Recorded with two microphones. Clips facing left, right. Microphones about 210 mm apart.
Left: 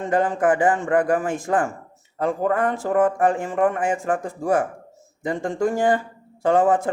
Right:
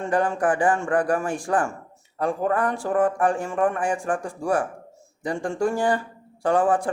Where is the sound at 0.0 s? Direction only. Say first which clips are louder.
Left 2 dB; 20° left (ahead or behind).